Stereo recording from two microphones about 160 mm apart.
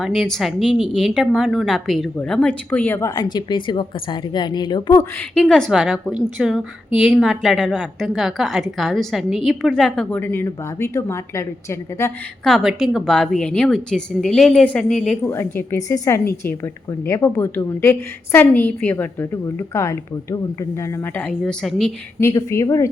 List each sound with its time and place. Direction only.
0.0 s a woman's voice: centre (ahead or behind)
3.2 s a woman's voice: 25° left (ahead or behind)
5.3 s a woman's voice: 5° left (ahead or behind)
12.5 s a woman's voice: centre (ahead or behind)
15.3 s a woman's voice: 15° left (ahead or behind)
22.2 s a woman's voice: 20° left (ahead or behind)